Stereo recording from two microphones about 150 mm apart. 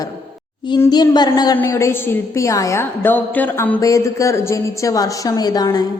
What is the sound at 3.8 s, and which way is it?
A woman's voice, 20° left (ahead or behind).